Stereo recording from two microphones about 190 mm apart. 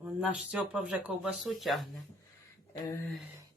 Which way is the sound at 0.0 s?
5° right (ahead or behind).